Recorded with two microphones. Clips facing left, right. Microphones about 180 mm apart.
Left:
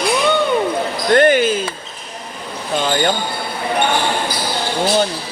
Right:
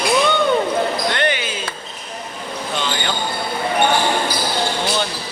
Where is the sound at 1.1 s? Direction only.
45° left (ahead or behind).